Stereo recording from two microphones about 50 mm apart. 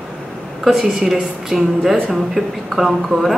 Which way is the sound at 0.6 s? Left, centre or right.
Centre.